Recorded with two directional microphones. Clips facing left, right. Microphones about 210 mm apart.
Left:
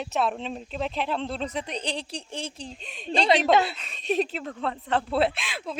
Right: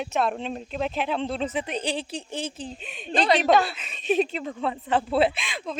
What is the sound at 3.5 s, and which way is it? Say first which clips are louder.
Speech: right 1 dB; 25° left (ahead or behind).